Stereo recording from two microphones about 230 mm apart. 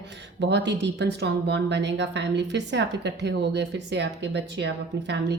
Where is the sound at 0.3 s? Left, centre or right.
Right.